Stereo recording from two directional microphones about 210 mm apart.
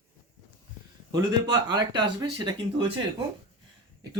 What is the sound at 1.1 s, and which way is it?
Speech, 20° right (ahead or behind).